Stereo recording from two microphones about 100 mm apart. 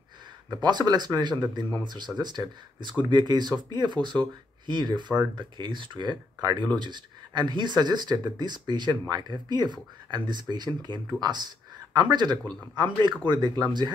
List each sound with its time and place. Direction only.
0.6 s speech: 45° right (ahead or behind)